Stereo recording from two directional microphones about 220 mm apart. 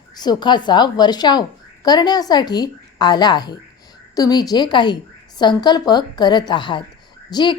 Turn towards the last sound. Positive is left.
turn(degrees=20)  # may be behind; listen again after turning